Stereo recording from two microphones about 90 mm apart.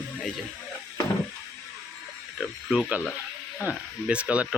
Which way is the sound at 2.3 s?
5° right (ahead or behind).